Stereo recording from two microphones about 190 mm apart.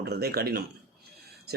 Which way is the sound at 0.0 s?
55° right (ahead or behind).